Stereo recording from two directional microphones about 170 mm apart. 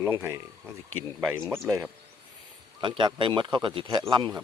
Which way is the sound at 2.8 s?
30° right (ahead or behind).